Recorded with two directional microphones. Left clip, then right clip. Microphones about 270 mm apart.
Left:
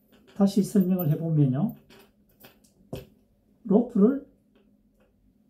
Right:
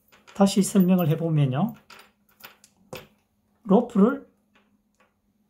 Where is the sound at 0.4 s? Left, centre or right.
Right.